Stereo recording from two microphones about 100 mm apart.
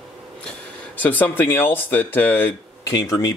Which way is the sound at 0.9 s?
15° left (ahead or behind).